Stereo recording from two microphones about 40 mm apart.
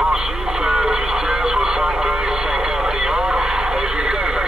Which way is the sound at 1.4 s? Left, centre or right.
Centre.